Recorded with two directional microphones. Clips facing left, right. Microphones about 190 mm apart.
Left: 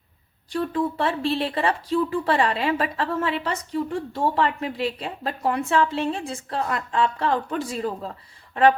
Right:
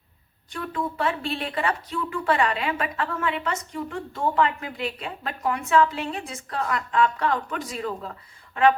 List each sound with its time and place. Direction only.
0.5 s speech: 30° left (ahead or behind)